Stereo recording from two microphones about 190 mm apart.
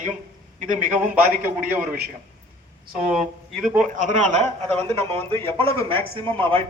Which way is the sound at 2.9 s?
5° right (ahead or behind).